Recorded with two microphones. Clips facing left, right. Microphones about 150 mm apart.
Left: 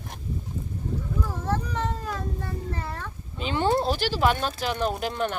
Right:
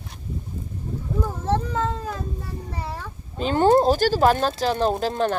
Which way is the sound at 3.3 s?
45° right (ahead or behind).